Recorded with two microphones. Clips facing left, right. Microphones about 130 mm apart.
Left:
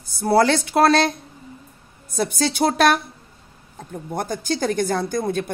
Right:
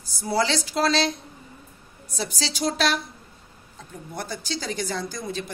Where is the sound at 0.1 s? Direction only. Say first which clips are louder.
Left 7 dB; 60° left (ahead or behind).